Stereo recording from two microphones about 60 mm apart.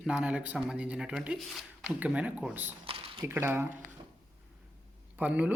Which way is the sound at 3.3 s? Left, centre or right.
Right.